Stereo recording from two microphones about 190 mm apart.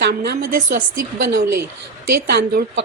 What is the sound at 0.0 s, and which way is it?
Speech, 55° right (ahead or behind).